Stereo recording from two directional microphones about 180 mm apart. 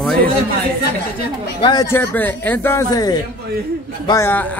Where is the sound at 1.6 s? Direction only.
25° left (ahead or behind).